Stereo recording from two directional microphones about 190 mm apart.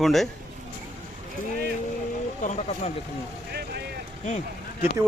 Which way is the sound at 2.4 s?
35° left (ahead or behind).